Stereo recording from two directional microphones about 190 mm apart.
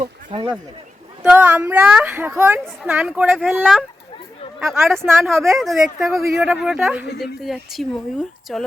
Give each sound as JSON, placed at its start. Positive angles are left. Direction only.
{"t": 0.0, "sound": "speech", "side_deg": -25}
{"t": 1.2, "sound": "a woman's voice", "side_deg": -5}
{"t": 5.0, "sound": "a woman's voice", "side_deg": -5}